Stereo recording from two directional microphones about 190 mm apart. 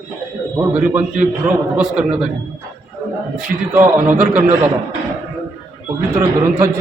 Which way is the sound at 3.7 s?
10° right (ahead or behind).